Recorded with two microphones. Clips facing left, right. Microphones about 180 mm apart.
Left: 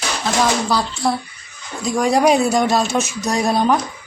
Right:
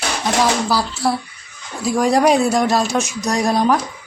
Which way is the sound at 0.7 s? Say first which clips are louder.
Even; 5° right (ahead or behind).